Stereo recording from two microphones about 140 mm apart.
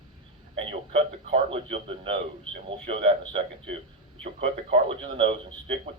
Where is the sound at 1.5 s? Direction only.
45° right (ahead or behind).